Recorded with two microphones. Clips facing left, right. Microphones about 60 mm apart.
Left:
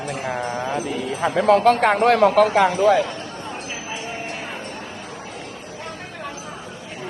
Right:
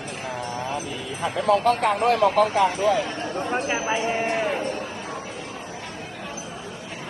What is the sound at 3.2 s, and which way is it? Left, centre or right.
Chatter, right.